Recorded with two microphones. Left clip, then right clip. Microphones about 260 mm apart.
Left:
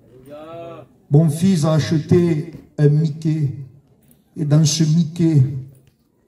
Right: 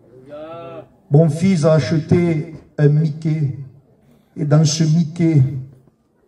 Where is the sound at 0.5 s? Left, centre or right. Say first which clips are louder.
Right 1 dB; left.